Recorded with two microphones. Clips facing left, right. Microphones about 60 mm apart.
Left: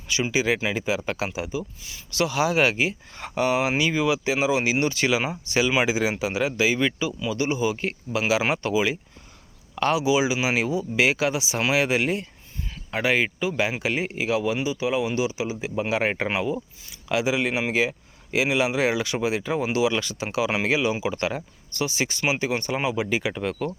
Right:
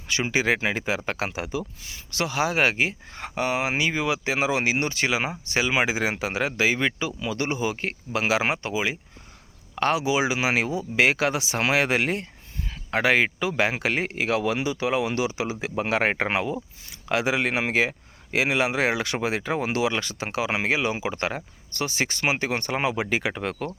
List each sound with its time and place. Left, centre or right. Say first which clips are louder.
0.1 s speech: even; right
8.6 s speech: left 4 dB; right
15.7 s speech: right 1 dB; right